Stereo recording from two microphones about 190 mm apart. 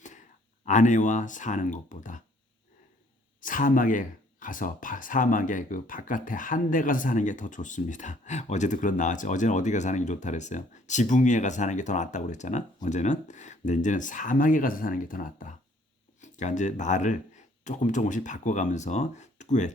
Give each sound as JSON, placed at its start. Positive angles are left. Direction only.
{"t": 0.6, "sound": "speech", "side_deg": 40}
{"t": 3.4, "sound": "speech", "side_deg": 45}